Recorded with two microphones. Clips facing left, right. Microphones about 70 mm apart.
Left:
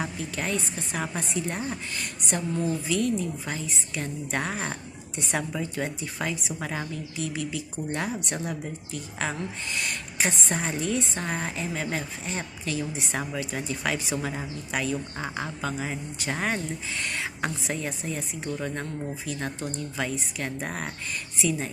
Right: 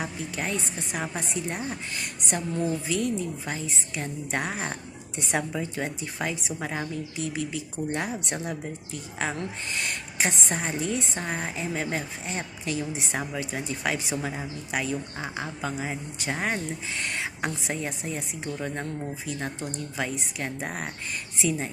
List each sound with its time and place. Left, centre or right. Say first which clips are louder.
0.3 s a woman's voice: left 1 dB; right
9.7 s a woman's voice: even; right
11.2 s a woman's voice: even; centre
16.3 s speech: even; centre
17.0 s a woman's voice: even; right
21.3 s speech: even; right